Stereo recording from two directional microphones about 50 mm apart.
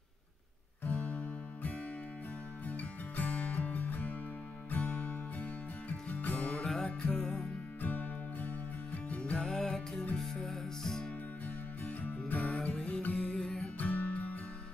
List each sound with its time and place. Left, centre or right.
0.8 s music: left
7.8 s music: left; by 11.1 s centre
11.4 s music: left
12.4 s music: centre
13.7 s music: left